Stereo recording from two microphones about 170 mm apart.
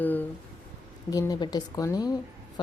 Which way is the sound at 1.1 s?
20° left (ahead or behind).